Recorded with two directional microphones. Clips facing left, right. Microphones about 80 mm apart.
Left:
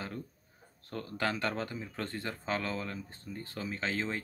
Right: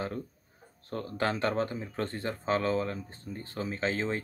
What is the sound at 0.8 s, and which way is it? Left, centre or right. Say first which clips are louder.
Speech: right 3 dB; right.